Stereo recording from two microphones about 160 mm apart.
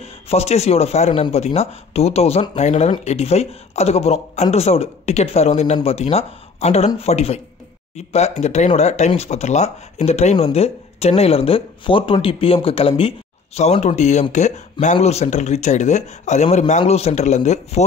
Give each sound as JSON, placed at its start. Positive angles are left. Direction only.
{"t": 0.0, "sound": "a man's voice", "side_deg": 40}